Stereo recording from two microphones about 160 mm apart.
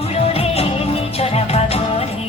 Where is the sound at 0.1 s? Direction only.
40° left (ahead or behind).